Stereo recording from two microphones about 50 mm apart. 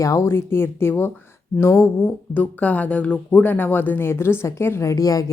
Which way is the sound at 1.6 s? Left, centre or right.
Left.